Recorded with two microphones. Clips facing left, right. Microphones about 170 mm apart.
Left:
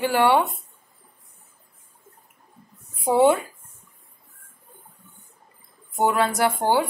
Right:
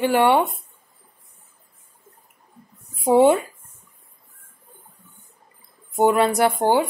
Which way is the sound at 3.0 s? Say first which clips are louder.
Right 3 dB; 20° right (ahead or behind).